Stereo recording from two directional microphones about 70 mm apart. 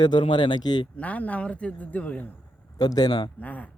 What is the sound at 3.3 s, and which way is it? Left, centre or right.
Speech, left.